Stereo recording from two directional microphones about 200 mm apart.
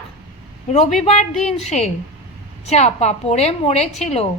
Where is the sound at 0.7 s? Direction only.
35° left (ahead or behind).